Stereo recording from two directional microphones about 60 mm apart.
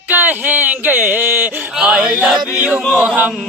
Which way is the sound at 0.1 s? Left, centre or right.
Right.